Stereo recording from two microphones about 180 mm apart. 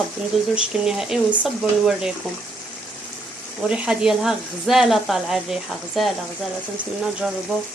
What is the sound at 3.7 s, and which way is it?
Speech, 5° right (ahead or behind).